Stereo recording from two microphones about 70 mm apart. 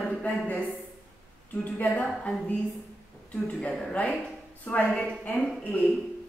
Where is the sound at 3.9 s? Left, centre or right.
Centre.